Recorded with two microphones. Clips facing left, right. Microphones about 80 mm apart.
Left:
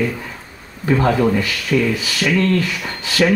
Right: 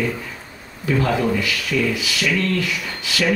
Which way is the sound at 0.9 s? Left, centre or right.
Left.